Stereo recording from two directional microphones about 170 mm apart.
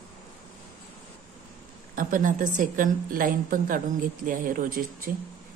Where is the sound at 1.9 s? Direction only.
50° right (ahead or behind).